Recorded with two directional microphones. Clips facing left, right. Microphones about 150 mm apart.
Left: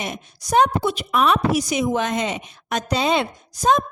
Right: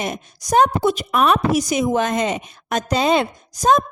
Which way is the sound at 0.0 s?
45° right (ahead or behind).